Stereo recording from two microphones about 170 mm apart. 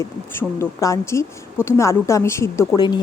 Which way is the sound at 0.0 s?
15° left (ahead or behind).